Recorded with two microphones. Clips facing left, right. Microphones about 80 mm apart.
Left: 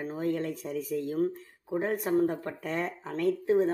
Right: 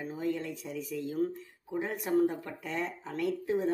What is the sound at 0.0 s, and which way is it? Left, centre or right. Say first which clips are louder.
Speech: left 3 dB; left.